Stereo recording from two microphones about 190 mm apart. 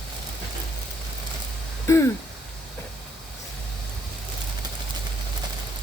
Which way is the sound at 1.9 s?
15° left (ahead or behind).